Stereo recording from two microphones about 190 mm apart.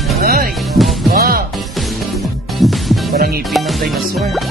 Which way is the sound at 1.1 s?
50° right (ahead or behind).